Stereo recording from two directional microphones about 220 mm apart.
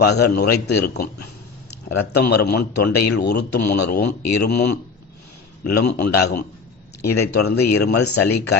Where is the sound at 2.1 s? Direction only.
50° left (ahead or behind).